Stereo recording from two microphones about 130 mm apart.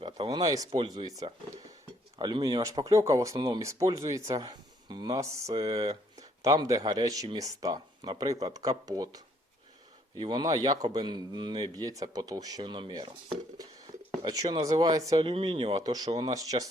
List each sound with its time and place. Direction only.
0.3 s speech: 30° right (ahead or behind)
14.3 s speech: 30° right (ahead or behind)
15.2 s speech: 45° right (ahead or behind)
15.7 s speech: 30° right (ahead or behind)